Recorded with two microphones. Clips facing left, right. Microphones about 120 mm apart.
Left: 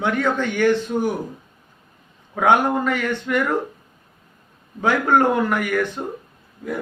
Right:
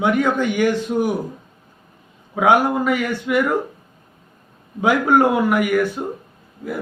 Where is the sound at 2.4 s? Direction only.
5° right (ahead or behind).